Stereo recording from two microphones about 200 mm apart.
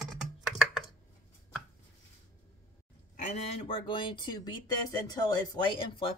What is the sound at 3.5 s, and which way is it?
Speech, 25° left (ahead or behind).